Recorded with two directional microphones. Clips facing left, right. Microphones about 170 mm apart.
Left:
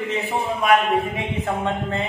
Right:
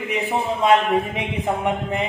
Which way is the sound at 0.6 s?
20° right (ahead or behind).